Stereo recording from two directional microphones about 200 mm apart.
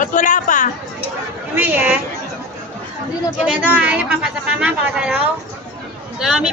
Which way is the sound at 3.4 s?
5° right (ahead or behind).